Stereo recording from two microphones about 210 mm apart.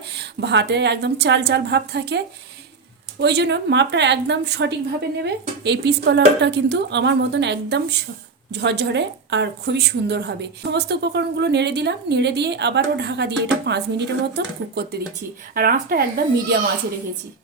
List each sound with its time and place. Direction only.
0.1 s a woman's voice: 55° right (ahead or behind)